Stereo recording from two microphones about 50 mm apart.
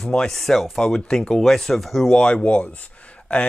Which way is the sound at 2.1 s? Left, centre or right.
Centre.